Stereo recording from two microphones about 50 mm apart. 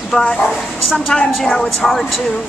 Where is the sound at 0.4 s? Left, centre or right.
Centre.